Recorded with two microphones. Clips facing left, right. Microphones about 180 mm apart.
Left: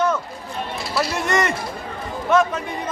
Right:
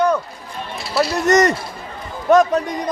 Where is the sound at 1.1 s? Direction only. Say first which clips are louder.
Right 9 dB; 40° right (ahead or behind).